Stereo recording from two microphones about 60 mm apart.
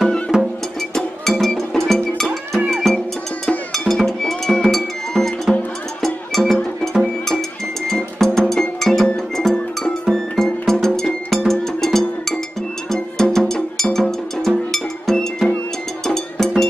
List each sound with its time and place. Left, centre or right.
0.3 s music: centre
1.4 s cowbell: centre
3.7 s music: centre